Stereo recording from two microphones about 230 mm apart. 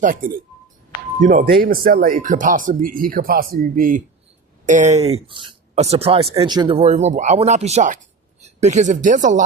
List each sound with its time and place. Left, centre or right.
0.0 s speech: right